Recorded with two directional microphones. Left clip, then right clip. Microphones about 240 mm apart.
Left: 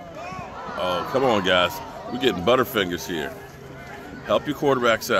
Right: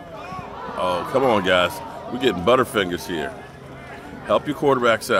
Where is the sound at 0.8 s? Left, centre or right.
Centre.